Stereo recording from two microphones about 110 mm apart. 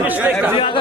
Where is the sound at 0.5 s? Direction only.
50° left (ahead or behind).